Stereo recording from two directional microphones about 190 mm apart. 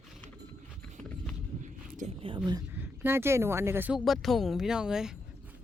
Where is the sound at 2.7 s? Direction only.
10° right (ahead or behind).